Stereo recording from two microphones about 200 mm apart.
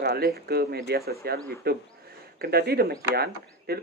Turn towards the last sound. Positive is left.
turn(degrees=-50)  # may be behind; listen again after turning